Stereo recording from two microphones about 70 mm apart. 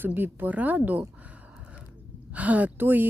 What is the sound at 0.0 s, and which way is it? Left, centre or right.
A woman's voice, right.